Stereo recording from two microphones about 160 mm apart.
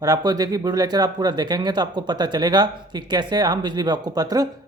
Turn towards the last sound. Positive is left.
turn(degrees=-25)  # may be behind; listen again after turning